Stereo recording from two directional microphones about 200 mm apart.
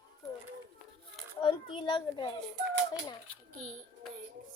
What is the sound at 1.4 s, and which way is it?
Speech, 25° left (ahead or behind).